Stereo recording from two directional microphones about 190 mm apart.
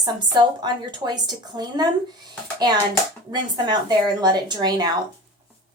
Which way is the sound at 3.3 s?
25° right (ahead or behind).